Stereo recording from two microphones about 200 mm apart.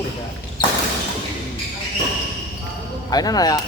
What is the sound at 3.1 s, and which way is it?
Speech, 20° left (ahead or behind).